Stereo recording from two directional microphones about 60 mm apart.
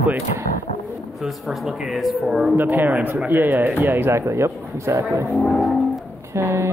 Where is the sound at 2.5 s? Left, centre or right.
Right.